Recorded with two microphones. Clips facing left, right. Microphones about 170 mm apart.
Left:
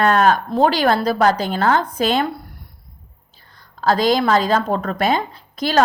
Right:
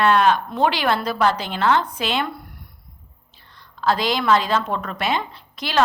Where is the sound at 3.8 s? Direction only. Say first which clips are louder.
Left 5 dB; 40° left (ahead or behind).